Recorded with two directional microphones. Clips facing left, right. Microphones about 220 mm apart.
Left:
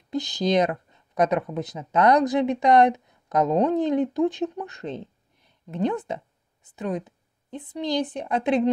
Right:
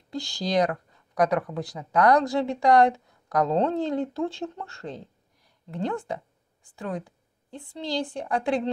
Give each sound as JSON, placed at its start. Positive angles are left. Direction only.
{"t": 0.1, "sound": "a woman's voice", "side_deg": 20}